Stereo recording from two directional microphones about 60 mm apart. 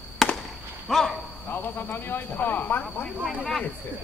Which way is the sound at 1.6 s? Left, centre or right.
Left.